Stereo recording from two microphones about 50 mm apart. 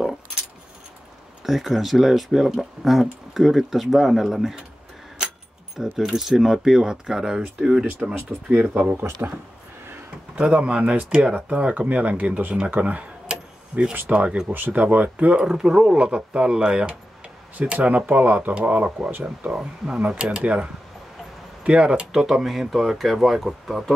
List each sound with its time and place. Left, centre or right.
1.4 s speech: centre
5.8 s speech: centre; by 8.5 s right
8.7 s speech: right
10.3 s speech: right
12.7 s a sound: right
14.0 s speech: right
14.5 s speech: right
15.4 s speech: centre
17.8 s speech: right
21.6 s speech: right
22.1 s speech: centre